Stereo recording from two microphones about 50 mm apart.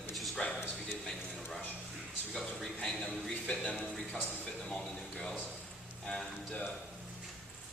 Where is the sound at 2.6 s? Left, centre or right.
Centre.